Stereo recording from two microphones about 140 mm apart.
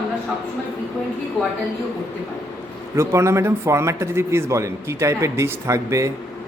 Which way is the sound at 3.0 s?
20° right (ahead or behind).